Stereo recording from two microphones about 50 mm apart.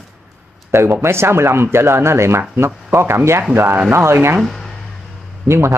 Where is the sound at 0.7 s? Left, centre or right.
Right.